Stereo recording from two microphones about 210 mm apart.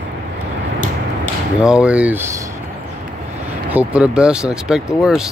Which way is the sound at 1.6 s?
5° right (ahead or behind).